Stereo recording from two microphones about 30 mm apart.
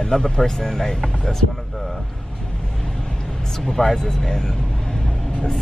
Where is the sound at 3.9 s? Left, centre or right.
Left.